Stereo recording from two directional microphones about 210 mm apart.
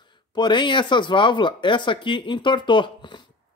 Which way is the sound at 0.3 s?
20° left (ahead or behind).